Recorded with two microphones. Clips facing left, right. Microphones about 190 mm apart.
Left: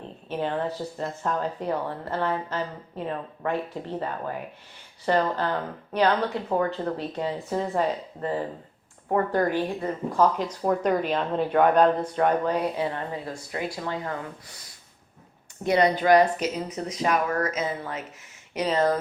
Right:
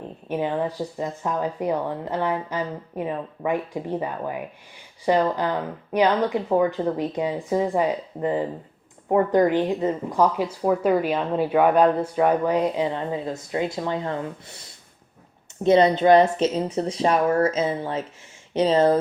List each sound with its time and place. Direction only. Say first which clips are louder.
0.3 s speech: right 3 dB; 10° right (ahead or behind); by 18.9 s 30° right (ahead or behind)